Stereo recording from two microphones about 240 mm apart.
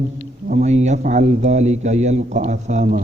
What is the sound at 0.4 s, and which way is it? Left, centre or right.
A man's voice, right.